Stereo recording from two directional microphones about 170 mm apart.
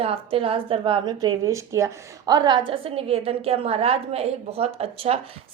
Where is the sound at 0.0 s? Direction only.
35° right (ahead or behind).